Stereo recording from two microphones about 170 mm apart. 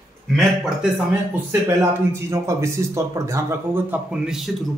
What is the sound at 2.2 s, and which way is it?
Speech, 15° right (ahead or behind).